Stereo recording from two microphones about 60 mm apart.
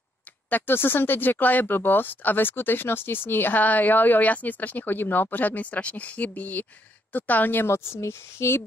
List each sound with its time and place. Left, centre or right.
0.5 s speech: left
7.6 s speech: left